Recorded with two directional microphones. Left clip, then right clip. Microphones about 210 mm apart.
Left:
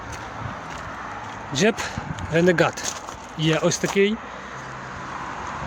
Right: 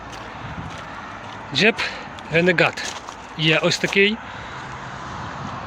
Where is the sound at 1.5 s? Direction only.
15° left (ahead or behind).